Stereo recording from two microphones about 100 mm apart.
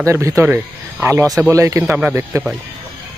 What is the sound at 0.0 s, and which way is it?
Speech, 30° right (ahead or behind).